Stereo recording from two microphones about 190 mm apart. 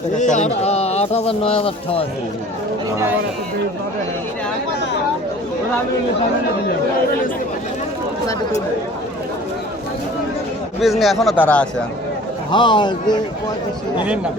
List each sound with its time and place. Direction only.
0.2 s a man's voice: 40° left (ahead or behind)
10.8 s a man's voice: centre (ahead or behind)
12.5 s a man's voice: 25° left (ahead or behind)